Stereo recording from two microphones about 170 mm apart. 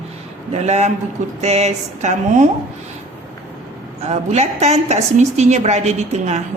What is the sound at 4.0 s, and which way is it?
A woman's voice, 40° right (ahead or behind).